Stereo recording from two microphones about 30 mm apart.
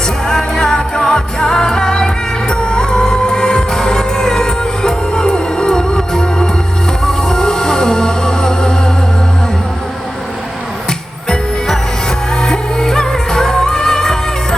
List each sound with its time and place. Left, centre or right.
0.3 s music: centre
12.4 s music: centre